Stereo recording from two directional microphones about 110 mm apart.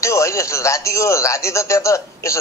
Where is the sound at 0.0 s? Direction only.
25° left (ahead or behind).